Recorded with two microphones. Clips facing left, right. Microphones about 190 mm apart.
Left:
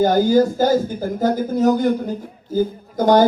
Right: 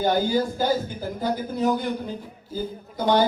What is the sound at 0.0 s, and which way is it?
Speech, 45° left (ahead or behind).